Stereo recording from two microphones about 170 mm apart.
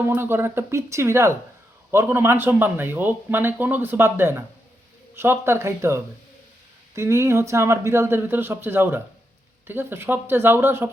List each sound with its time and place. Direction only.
0.0 s speech: 15° right (ahead or behind)